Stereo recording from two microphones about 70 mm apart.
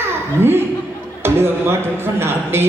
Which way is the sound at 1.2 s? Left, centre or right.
Right.